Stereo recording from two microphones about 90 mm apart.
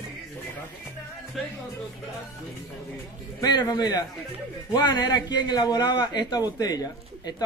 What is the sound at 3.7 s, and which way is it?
A man's voice, 50° left (ahead or behind).